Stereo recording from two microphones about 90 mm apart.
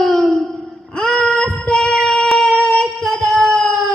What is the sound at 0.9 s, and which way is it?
Child singing, centre (ahead or behind).